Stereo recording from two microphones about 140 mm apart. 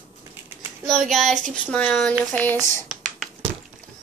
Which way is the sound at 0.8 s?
Centre (ahead or behind).